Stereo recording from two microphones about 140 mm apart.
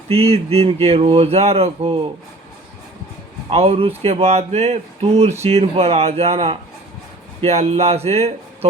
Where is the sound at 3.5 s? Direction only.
45° right (ahead or behind).